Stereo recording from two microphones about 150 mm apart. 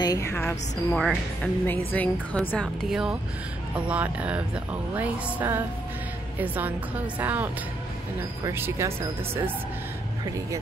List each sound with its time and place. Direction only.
0.0 s a woman's voice: 25° left (ahead or behind)
0.9 s speech: 5° left (ahead or behind)
2.6 s speech: centre (ahead or behind)